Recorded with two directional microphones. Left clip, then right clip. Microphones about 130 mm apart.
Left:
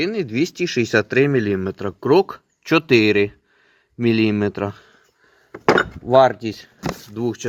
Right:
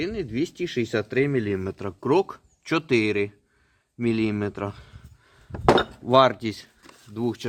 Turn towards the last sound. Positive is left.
turn(degrees=15)  # may be behind; listen again after turning